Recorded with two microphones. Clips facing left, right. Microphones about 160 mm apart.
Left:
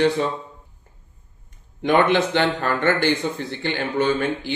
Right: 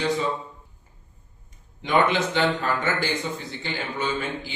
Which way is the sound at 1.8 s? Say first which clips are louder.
Left 4 dB; 55° left (ahead or behind).